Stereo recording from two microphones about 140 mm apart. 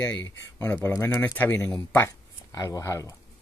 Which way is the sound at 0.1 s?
10° left (ahead or behind).